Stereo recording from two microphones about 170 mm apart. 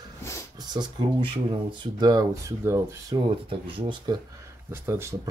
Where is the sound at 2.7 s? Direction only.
20° right (ahead or behind).